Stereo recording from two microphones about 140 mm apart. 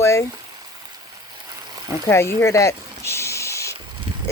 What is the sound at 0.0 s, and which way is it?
Boiling, 20° left (ahead or behind).